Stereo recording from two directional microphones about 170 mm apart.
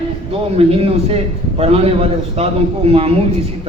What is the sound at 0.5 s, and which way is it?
A man's voice, 35° right (ahead or behind).